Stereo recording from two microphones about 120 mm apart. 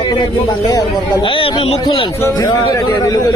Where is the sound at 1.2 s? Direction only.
45° left (ahead or behind).